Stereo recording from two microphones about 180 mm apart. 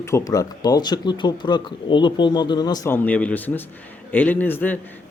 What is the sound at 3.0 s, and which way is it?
Speech, 5° left (ahead or behind).